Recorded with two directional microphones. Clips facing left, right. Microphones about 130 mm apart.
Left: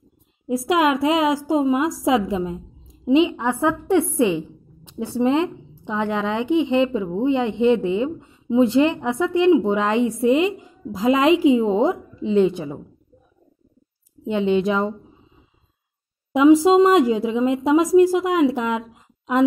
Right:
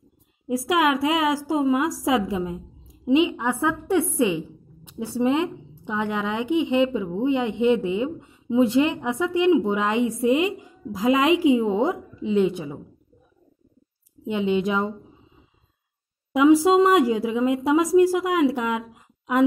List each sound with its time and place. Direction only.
0.5 s a woman's voice: 25° left (ahead or behind)
14.2 s speech: 30° left (ahead or behind)
16.3 s a woman's voice: 20° left (ahead or behind)